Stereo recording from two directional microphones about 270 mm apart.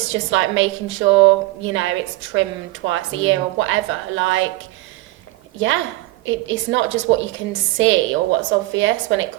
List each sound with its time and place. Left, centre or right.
0.1 s a woman's voice: right
5.5 s a woman's voice: right